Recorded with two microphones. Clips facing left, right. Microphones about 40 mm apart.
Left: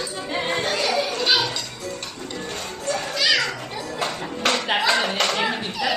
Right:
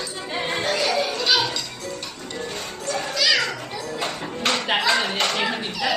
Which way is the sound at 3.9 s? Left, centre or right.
Centre.